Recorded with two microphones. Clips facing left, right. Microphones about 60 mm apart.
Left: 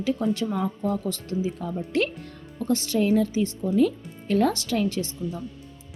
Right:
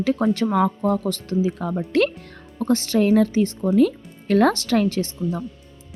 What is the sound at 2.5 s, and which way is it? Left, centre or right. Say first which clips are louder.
Speech: right 4 dB; right.